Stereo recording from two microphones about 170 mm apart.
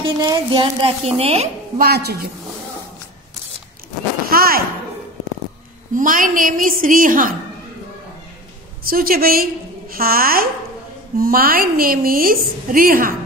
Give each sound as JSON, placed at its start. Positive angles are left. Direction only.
{"t": 0.0, "sound": "a woman's voice", "side_deg": -25}
{"t": 1.8, "sound": "a woman's voice", "side_deg": -70}
{"t": 4.3, "sound": "a sound", "side_deg": -60}
{"t": 5.9, "sound": "a woman's voice", "side_deg": -50}
{"t": 8.8, "sound": "a woman's voice", "side_deg": -60}